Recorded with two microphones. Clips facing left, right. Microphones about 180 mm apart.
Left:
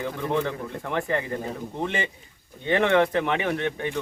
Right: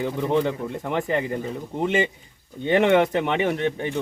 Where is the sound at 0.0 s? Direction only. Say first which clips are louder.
Right 4 dB; 20° right (ahead or behind).